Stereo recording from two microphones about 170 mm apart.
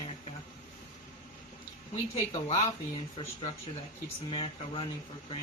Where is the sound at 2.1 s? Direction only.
35° left (ahead or behind).